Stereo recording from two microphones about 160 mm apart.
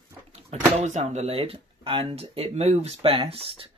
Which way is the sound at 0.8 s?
45° right (ahead or behind).